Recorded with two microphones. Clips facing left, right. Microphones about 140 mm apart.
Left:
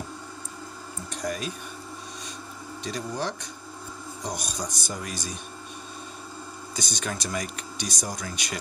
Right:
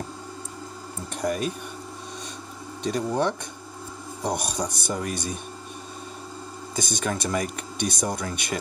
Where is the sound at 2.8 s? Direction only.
60° right (ahead or behind).